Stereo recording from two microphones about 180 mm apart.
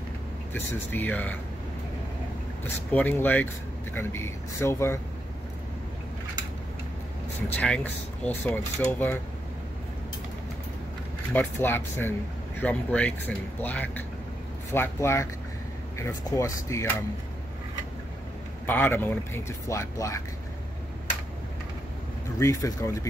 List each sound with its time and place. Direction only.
0.5 s speech: 10° left (ahead or behind)
2.6 s speech: 10° left (ahead or behind)
7.4 s speech: 5° left (ahead or behind)
11.3 s speech: 10° left (ahead or behind)
18.7 s speech: 10° left (ahead or behind)
22.4 s speech: 15° left (ahead or behind)